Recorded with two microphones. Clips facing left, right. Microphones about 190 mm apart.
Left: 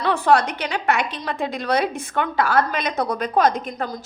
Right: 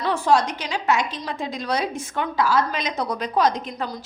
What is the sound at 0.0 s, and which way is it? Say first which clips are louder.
A woman's voice: left 2 dB; 60° left (ahead or behind).